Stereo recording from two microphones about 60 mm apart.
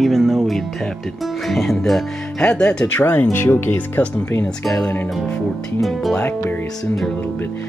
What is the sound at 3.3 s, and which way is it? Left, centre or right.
Speech, left.